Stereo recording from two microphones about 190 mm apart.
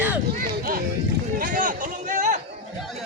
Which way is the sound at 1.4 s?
45° right (ahead or behind).